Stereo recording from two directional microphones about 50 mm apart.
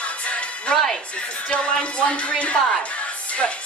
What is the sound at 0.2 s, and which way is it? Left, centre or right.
Music, left.